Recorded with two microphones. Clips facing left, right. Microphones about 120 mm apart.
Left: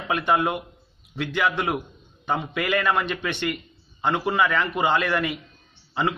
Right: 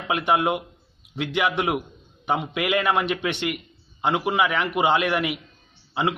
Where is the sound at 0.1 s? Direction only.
20° right (ahead or behind).